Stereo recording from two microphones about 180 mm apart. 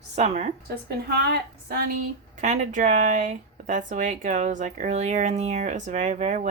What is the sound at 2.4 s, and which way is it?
Speech, 40° right (ahead or behind).